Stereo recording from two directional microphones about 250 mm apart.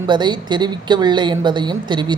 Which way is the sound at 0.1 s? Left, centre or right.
Centre.